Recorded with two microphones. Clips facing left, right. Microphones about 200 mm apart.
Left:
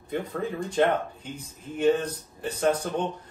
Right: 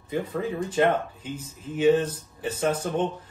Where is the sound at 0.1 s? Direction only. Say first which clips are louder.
Right 2 dB; centre (ahead or behind).